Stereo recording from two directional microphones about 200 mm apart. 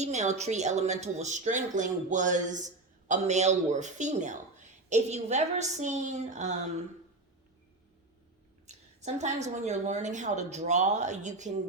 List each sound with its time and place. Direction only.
0.0 s speech: 35° right (ahead or behind)
8.6 s speech: 35° right (ahead or behind)